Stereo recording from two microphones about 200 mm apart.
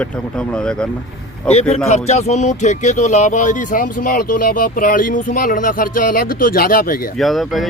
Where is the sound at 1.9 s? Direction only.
35° left (ahead or behind).